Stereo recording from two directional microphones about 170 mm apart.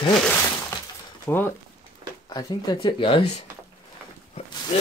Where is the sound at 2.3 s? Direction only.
25° left (ahead or behind).